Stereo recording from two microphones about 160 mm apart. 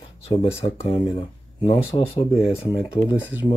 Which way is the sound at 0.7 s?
30° left (ahead or behind).